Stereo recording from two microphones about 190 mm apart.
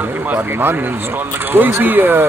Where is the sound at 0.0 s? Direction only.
10° right (ahead or behind).